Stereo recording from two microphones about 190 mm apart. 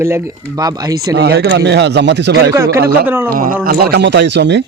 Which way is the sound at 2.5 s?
15° right (ahead or behind).